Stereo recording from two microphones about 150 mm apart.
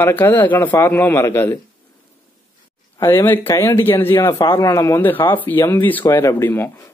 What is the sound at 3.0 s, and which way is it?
Speech, 15° left (ahead or behind).